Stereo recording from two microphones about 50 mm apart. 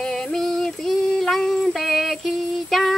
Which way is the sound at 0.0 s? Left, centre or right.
Centre.